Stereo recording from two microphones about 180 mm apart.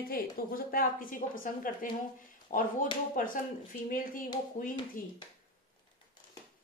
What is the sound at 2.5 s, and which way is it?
A woman's voice, 45° left (ahead or behind).